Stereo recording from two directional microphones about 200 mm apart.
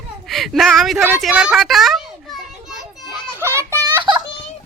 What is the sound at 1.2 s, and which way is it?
Children playing, 5° right (ahead or behind).